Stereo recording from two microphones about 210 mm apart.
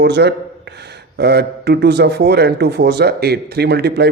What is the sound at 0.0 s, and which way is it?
A man's voice, 55° right (ahead or behind).